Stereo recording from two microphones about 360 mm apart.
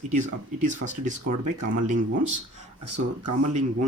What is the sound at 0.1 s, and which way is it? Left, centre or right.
Speech, right.